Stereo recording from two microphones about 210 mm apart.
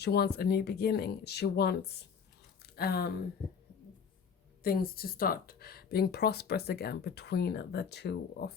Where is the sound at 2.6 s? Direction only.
45° left (ahead or behind).